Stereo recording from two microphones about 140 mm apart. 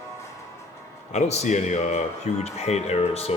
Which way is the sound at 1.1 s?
55° left (ahead or behind).